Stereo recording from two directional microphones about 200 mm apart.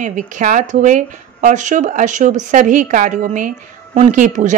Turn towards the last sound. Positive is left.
turn(degrees=-40)  # may be behind; listen again after turning